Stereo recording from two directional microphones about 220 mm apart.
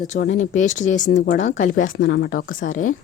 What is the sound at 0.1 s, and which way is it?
Speech, 35° left (ahead or behind).